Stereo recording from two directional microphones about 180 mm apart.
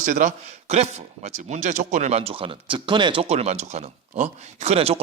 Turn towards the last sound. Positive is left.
turn(degrees=-35)  # may be behind; listen again after turning